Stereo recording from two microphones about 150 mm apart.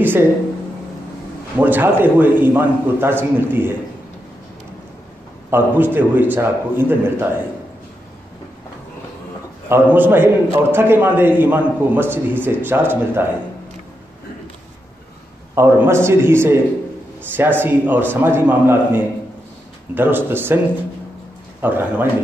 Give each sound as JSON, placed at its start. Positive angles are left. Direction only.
{"t": 0.0, "sound": "a sound", "side_deg": -15}
{"t": 1.6, "sound": "a man's voice", "side_deg": -10}
{"t": 5.5, "sound": "a man's voice", "side_deg": -15}
{"t": 9.7, "sound": "a man's voice", "side_deg": -10}
{"t": 15.5, "sound": "a man's voice", "side_deg": -15}
{"t": 21.5, "sound": "a man's voice", "side_deg": -15}